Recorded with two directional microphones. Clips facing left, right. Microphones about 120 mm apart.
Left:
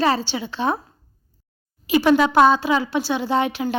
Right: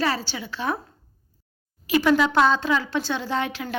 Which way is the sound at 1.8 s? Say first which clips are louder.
Left 3 dB; 20° left (ahead or behind).